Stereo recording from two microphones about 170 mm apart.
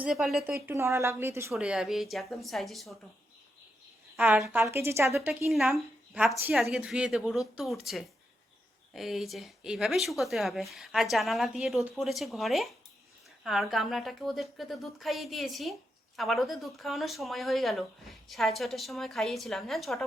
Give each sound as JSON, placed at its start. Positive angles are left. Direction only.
{"t": 0.0, "sound": "speech", "side_deg": 0}
{"t": 0.5, "sound": "a woman's voice", "side_deg": -15}
{"t": 1.5, "sound": "speech", "side_deg": -5}
{"t": 4.4, "sound": "speech", "side_deg": 0}
{"t": 4.6, "sound": "a woman's voice", "side_deg": -15}
{"t": 5.5, "sound": "a woman's voice", "side_deg": 0}